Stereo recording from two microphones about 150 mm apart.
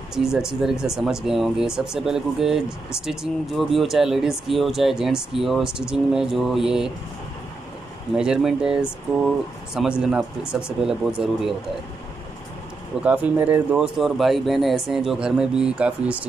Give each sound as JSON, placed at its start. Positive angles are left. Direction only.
{"t": 0.1, "sound": "speech", "side_deg": -5}
{"t": 8.2, "sound": "speech", "side_deg": -5}
{"t": 9.8, "sound": "speech", "side_deg": -5}
{"t": 13.0, "sound": "speech", "side_deg": -10}